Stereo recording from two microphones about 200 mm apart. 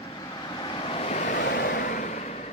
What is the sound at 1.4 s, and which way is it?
Vehicle, 50° left (ahead or behind).